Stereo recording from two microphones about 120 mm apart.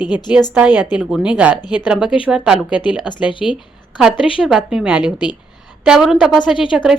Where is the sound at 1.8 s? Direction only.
10° right (ahead or behind).